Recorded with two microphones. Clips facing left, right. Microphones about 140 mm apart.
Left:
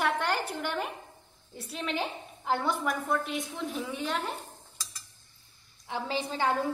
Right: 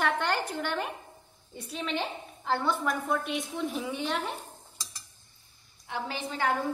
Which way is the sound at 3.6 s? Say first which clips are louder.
Right 2 dB; 5° right (ahead or behind).